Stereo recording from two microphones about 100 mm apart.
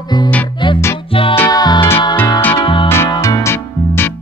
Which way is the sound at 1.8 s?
25° left (ahead or behind).